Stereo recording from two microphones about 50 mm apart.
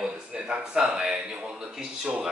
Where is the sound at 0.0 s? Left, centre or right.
Right.